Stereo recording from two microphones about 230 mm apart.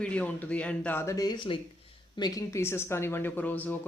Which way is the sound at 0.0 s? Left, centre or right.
Centre.